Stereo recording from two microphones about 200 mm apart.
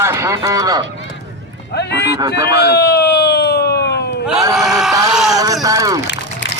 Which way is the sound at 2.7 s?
55° left (ahead or behind).